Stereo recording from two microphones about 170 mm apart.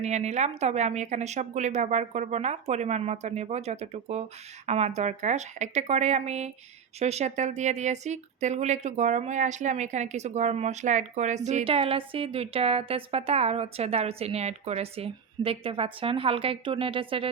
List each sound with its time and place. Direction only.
0.0 s speech: 40° right (ahead or behind)